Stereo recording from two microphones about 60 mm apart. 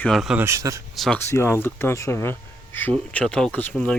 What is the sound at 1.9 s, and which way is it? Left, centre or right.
Speech, left.